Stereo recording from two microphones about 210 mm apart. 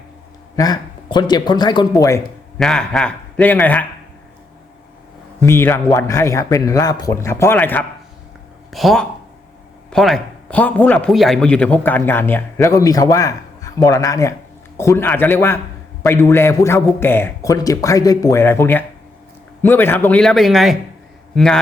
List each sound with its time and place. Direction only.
0.5 s speech: 20° left (ahead or behind)
2.6 s a man's voice: centre (ahead or behind)
5.4 s a man's voice: 10° left (ahead or behind)